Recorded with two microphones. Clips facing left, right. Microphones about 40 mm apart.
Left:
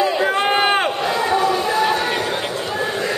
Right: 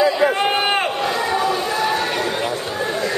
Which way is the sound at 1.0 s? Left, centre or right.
Centre.